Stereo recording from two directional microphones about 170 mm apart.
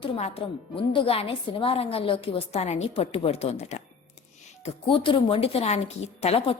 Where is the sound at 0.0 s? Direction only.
35° left (ahead or behind).